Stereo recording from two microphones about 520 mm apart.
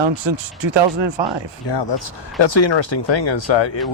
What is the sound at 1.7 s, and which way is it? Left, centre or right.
Speech, left.